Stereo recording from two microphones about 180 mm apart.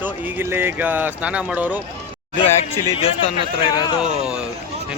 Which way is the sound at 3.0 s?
30° left (ahead or behind).